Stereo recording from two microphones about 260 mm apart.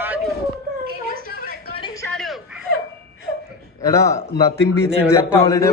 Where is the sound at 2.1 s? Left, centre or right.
Centre.